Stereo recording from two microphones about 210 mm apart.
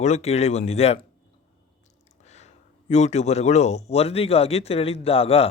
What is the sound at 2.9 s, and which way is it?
A man's voice, 30° left (ahead or behind).